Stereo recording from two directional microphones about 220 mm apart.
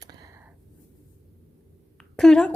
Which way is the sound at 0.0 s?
15° right (ahead or behind).